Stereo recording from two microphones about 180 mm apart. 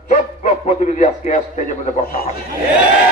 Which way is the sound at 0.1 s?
40° left (ahead or behind).